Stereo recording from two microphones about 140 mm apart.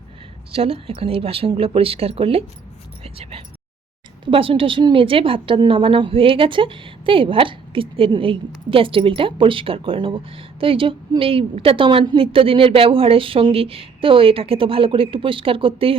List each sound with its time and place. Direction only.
0.5 s a woman's voice: 45° right (ahead or behind)